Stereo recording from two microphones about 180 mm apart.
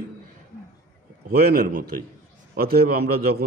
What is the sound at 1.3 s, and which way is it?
A man's voice, 55° right (ahead or behind).